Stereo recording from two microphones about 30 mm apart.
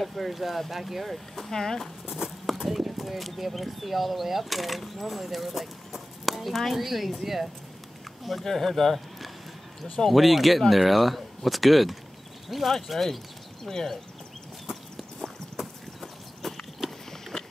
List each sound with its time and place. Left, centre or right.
0.0 s speech: centre
1.3 s speech: centre
2.6 s speech: centre
8.5 s speech: centre
10.0 s speech: centre
13.7 s speech: centre
15.5 s clip-clop: centre
17.3 s a sound: left